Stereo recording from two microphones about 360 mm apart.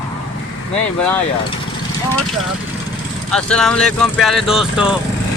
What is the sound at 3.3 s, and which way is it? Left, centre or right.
Speech, centre.